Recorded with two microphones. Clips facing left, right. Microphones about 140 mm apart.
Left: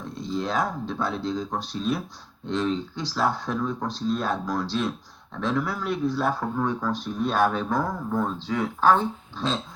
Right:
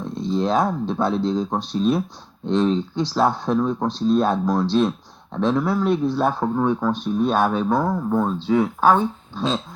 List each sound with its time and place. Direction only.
0.1 s speech: 25° right (ahead or behind)